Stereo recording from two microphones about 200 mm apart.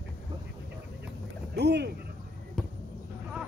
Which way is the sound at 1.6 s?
55° right (ahead or behind).